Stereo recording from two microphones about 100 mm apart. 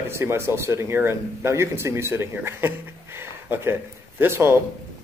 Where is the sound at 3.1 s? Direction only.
25° right (ahead or behind).